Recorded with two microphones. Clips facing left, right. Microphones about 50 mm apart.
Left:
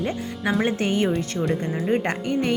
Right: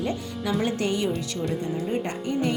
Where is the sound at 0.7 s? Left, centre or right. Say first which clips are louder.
Left 3 dB; left.